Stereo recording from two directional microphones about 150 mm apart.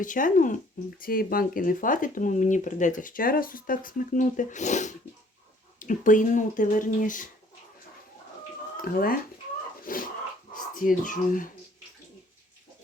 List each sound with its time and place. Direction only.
0.0 s speech: 60° left (ahead or behind)
0.9 s speech: 75° left (ahead or behind)
8.8 s speech: 75° left (ahead or behind)